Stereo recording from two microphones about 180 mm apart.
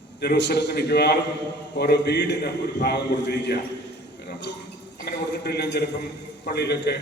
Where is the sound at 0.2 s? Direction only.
70° left (ahead or behind).